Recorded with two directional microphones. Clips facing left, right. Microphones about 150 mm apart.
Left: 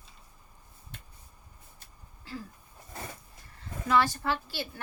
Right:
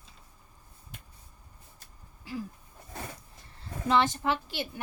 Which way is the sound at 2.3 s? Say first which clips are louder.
Right 4 dB; 15° right (ahead or behind).